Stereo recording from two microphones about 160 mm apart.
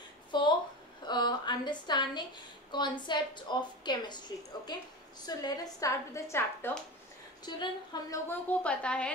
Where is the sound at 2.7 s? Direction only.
30° left (ahead or behind).